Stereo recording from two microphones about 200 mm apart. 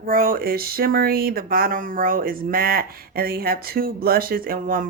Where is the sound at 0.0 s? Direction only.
45° right (ahead or behind).